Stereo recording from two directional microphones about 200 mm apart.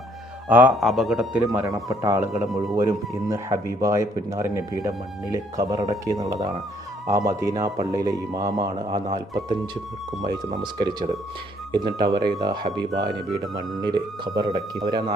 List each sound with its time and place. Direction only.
0.4 s a man's voice: 5° right (ahead or behind)
5.5 s a man's voice: 20° right (ahead or behind)